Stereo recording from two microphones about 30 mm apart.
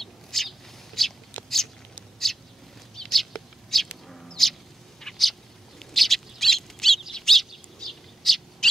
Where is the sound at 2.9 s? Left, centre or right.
Centre.